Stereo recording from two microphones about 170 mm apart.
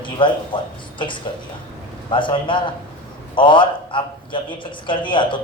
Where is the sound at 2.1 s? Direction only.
30° left (ahead or behind).